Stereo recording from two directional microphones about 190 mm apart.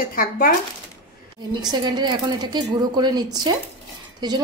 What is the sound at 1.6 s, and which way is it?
A woman's voice, 20° right (ahead or behind).